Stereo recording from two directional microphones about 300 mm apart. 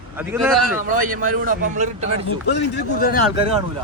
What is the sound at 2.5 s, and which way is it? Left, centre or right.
Speech, left.